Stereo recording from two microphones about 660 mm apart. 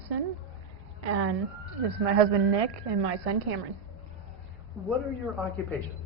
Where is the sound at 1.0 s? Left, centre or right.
Right.